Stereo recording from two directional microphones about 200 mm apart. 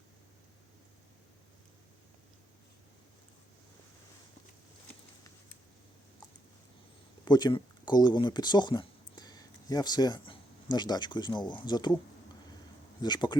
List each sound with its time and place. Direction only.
7.3 s speech: 20° left (ahead or behind)
13.0 s speech: 20° left (ahead or behind)